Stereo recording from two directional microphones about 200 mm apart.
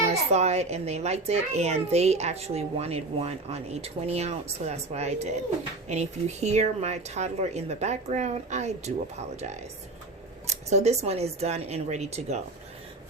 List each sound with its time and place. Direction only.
0.1 s a child's voice: 35° right (ahead or behind)